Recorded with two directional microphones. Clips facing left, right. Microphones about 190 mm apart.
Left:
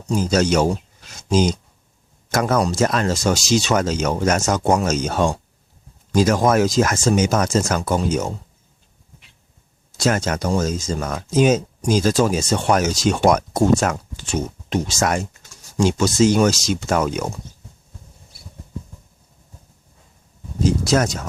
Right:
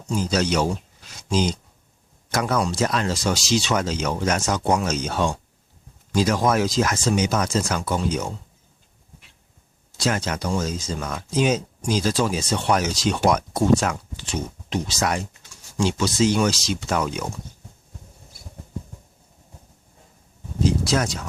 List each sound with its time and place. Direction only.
0.1 s speech: 45° left (ahead or behind)
10.0 s speech: 45° left (ahead or behind)
20.7 s speech: 45° left (ahead or behind)